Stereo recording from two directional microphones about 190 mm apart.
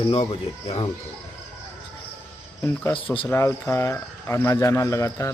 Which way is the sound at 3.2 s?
15° left (ahead or behind).